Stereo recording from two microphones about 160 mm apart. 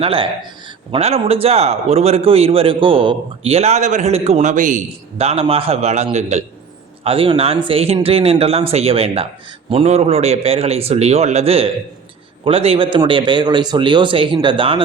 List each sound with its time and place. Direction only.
0.0 s a man's voice: 35° right (ahead or behind); by 4.8 s 55° right (ahead or behind)
5.1 s a man's voice: 40° right (ahead or behind)